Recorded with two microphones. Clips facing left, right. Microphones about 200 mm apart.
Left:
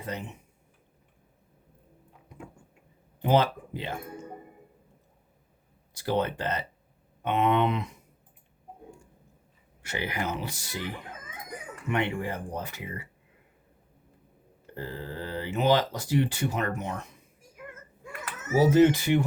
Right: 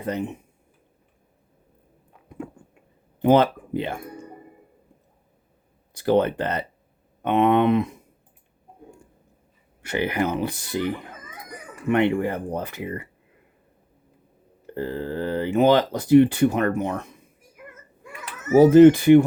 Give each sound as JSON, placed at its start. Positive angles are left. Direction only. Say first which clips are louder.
{"t": 0.0, "sound": "speech", "louder": "right 9 dB", "side_deg": -55}
{"t": 3.2, "sound": "speech", "louder": "right 7 dB", "side_deg": -60}
{"t": 5.9, "sound": "speech", "louder": "right 8 dB", "side_deg": -55}
{"t": 9.8, "sound": "speech", "louder": "right 8 dB", "side_deg": -60}
{"t": 14.8, "sound": "speech", "louder": "right 9 dB", "side_deg": -55}
{"t": 18.5, "sound": "speech", "louder": "right 9 dB", "side_deg": -55}